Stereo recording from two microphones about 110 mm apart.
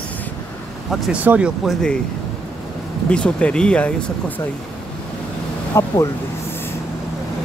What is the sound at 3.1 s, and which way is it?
Speech, 10° left (ahead or behind).